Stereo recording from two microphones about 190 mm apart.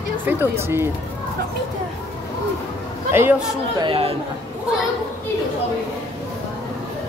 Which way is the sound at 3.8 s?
30° right (ahead or behind).